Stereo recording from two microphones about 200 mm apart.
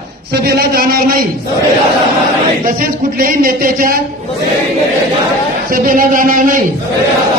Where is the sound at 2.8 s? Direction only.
45° right (ahead or behind).